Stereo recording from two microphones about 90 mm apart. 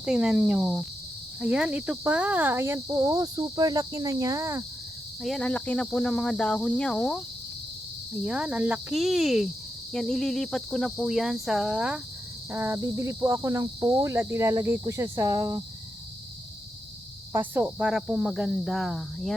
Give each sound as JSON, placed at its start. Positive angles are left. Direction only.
{"t": 0.0, "sound": "speech", "side_deg": -10}
{"t": 1.4, "sound": "cricket", "side_deg": -10}
{"t": 5.2, "sound": "speech", "side_deg": 5}
{"t": 8.1, "sound": "speech", "side_deg": -10}
{"t": 8.9, "sound": "cricket", "side_deg": -5}
{"t": 12.5, "sound": "cricket", "side_deg": -25}
{"t": 17.3, "sound": "cricket", "side_deg": -20}
{"t": 17.7, "sound": "speech", "side_deg": -10}